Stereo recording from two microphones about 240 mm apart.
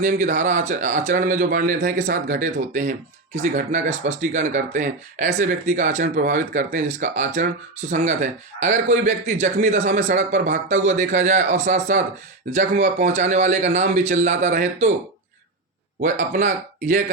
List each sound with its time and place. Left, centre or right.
0.2 s a man's voice: right
16.0 s a man's voice: right